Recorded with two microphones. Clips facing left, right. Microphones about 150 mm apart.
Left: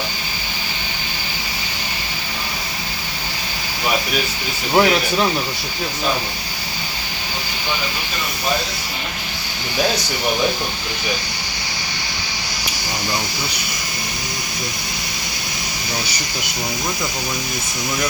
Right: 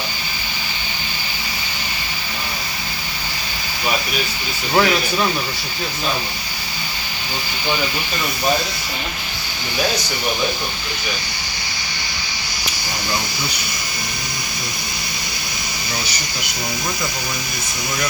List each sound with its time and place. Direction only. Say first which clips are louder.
4.7 s speech: left 2 dB; 20° left (ahead or behind)